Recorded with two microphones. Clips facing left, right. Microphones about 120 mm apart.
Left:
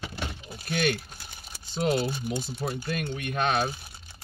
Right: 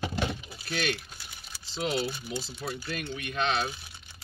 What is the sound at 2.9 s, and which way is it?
Speech, 50° left (ahead or behind).